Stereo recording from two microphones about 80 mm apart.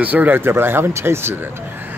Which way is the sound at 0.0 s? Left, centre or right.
Right.